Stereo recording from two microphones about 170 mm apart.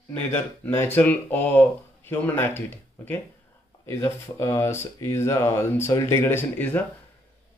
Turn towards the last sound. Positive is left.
turn(degrees=10)  # may be behind; listen again after turning